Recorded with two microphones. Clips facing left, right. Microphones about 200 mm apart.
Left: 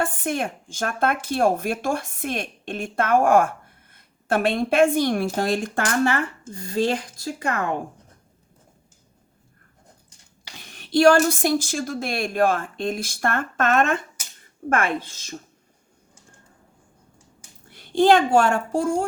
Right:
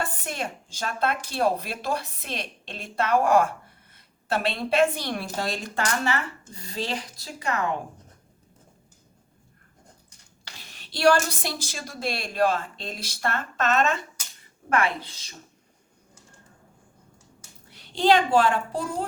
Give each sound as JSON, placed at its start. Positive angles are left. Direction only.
{"t": 0.0, "sound": "a woman's voice", "side_deg": 50}
{"t": 10.8, "sound": "a woman's voice", "side_deg": 50}
{"t": 17.7, "sound": "a woman's voice", "side_deg": 50}